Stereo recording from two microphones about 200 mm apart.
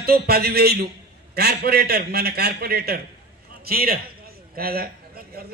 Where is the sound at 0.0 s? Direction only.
50° right (ahead or behind).